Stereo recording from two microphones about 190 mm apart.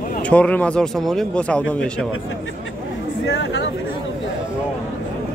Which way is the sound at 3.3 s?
65° left (ahead or behind).